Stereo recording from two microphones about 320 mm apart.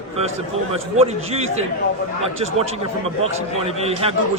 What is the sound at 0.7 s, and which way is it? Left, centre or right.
Speech, centre.